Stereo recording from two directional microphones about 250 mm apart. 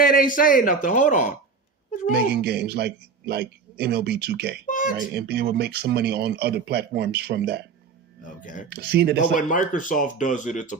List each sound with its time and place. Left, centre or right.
0.0 s speech: left
2.1 s a man's voice: right
4.6 s speech: left
5.1 s a man's voice: right
8.7 s a man's voice: right
9.3 s speech: left